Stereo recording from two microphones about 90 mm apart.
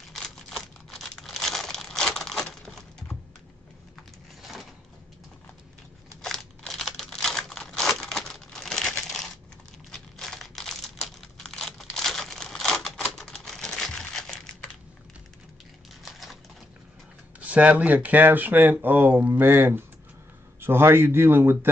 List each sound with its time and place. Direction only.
0.1 s crumpling: 5° left (ahead or behind)
4.4 s a sound: 5° right (ahead or behind)
6.2 s crumpling: 5° left (ahead or behind)
9.8 s computer keyboard: 5° left (ahead or behind)
16.0 s typewriter: centre (ahead or behind)
17.4 s speech: 15° right (ahead or behind)